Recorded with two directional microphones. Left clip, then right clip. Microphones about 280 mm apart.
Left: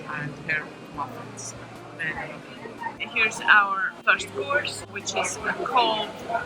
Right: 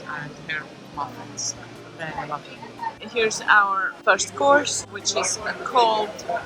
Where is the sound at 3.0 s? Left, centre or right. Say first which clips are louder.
Even; centre.